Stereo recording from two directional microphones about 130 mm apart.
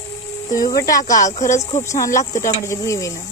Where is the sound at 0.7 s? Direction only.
25° left (ahead or behind).